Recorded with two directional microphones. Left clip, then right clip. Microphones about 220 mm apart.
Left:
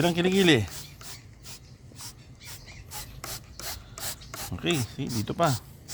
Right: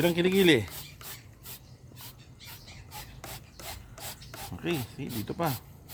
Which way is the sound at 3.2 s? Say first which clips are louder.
Left 7 dB; 10° left (ahead or behind).